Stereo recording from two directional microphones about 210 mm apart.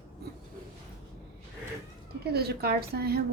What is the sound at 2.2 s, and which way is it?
A woman's voice, 50° right (ahead or behind).